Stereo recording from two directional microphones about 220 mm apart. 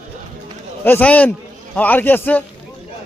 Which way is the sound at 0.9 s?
10° left (ahead or behind).